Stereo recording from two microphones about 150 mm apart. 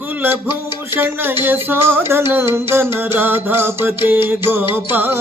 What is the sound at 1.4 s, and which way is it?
Music, 15° right (ahead or behind).